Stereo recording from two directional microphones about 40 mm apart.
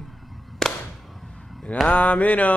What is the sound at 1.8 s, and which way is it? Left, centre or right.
Speech, left.